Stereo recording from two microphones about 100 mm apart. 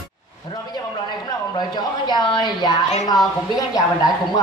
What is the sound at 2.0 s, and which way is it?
A woman's voice, 45° left (ahead or behind).